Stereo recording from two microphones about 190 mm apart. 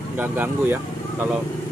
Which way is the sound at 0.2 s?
10° right (ahead or behind).